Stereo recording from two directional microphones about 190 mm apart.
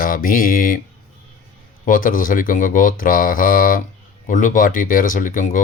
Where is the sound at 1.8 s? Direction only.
45° left (ahead or behind).